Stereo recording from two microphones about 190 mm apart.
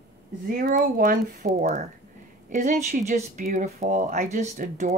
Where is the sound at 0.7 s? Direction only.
50° right (ahead or behind).